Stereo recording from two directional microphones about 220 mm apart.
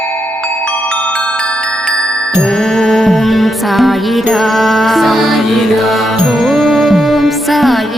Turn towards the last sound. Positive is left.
turn(degrees=0)  # may be behind; listen again after turning